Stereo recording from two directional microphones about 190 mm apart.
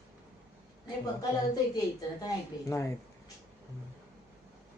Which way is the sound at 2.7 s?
15° left (ahead or behind).